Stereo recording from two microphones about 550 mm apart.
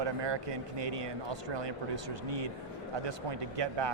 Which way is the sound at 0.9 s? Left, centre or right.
Right.